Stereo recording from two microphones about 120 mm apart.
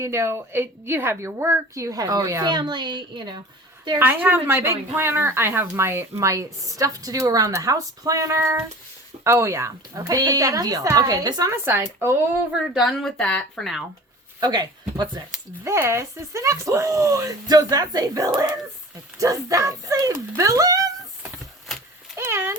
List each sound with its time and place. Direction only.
0.0 s speech: 20° right (ahead or behind); by 3.4 s 40° right (ahead or behind)
3.9 s speech: 15° right (ahead or behind)
12.6 s speech: centre (ahead or behind)
14.4 s speech: 35° right (ahead or behind)
15.6 s speech: 25° right (ahead or behind)
22.1 s speech: 20° right (ahead or behind)